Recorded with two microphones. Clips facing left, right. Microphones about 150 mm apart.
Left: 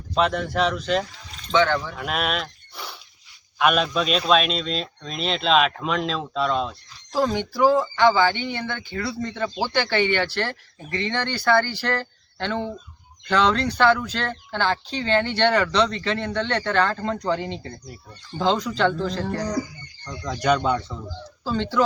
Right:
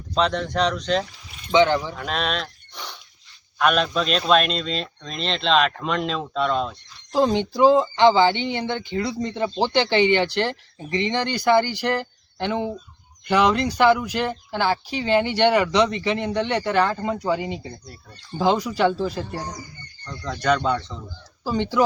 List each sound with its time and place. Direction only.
0.1 s a man's voice: 5° left (ahead or behind)
1.5 s speech: 15° right (ahead or behind)
2.0 s a sound: 5° left (ahead or behind)
3.6 s a man's voice: 5° left (ahead or behind)
7.1 s speech: 20° right (ahead or behind)
19.2 s speech: 75° left (ahead or behind)
20.1 s speech: 10° left (ahead or behind)
21.4 s speech: 15° right (ahead or behind)